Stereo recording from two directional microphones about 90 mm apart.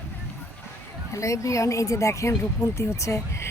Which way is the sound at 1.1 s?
35° left (ahead or behind).